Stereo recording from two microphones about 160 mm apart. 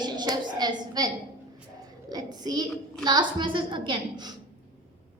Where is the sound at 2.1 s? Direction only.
25° right (ahead or behind).